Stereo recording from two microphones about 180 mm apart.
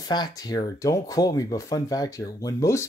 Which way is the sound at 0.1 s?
20° left (ahead or behind).